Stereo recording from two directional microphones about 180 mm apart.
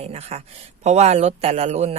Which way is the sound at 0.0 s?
35° right (ahead or behind).